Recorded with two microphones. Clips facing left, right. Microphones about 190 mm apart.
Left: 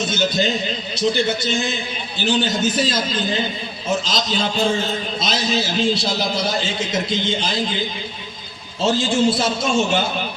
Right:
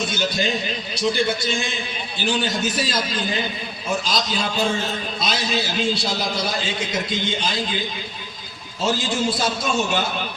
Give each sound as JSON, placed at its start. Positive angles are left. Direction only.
{"t": 0.0, "sound": "a man's voice", "side_deg": 25}
{"t": 8.8, "sound": "a man's voice", "side_deg": 25}